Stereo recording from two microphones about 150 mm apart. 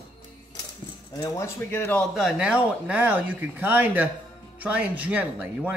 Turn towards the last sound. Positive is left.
turn(degrees=-10)  # may be behind; listen again after turning